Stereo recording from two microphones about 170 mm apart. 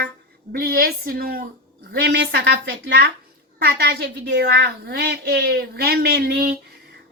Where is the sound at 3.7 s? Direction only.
70° right (ahead or behind).